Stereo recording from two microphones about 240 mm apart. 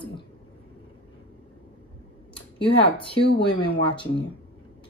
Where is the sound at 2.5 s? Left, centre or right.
Left.